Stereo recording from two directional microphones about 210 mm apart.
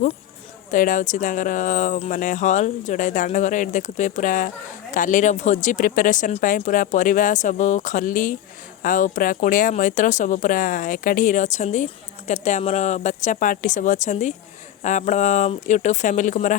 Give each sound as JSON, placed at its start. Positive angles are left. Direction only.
{"t": 0.7, "sound": "speech", "side_deg": 40}